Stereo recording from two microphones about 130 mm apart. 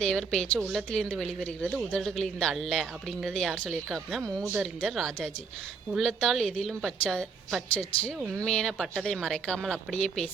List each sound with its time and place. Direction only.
0.0 s speech: 5° left (ahead or behind)
4.2 s speech: 25° right (ahead or behind)
4.5 s speech: 5° right (ahead or behind)
4.9 s speech: 5° left (ahead or behind)